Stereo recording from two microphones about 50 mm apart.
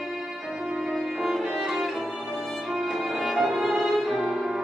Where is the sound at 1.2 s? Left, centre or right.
Centre.